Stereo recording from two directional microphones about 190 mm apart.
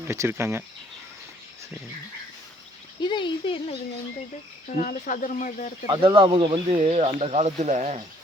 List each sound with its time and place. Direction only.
0.0 s speech: 15° right (ahead or behind)
3.0 s speech: 25° left (ahead or behind)
4.7 s speech: 40° left (ahead or behind)
5.8 s speech: 25° right (ahead or behind)